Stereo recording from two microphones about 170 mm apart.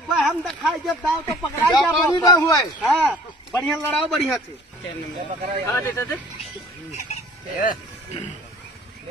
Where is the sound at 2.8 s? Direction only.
5° left (ahead or behind).